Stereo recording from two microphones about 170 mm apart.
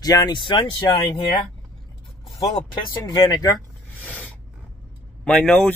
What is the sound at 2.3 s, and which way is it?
Speech, 30° left (ahead or behind).